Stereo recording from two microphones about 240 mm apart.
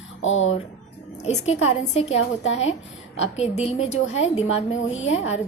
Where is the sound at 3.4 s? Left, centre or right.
Left.